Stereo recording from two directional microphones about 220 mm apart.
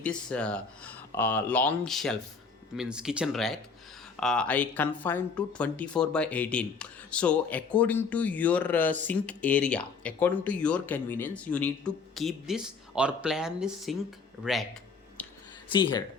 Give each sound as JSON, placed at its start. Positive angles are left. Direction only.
{"t": 0.0, "sound": "speech", "side_deg": 5}
{"t": 15.2, "sound": "a sound", "side_deg": 5}
{"t": 15.7, "sound": "speech", "side_deg": 20}